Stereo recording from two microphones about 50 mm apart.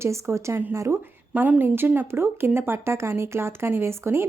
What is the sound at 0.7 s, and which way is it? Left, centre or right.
Speech, right.